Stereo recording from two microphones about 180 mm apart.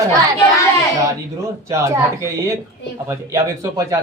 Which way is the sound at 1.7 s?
15° right (ahead or behind).